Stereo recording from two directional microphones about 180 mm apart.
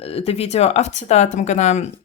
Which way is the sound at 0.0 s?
35° left (ahead or behind).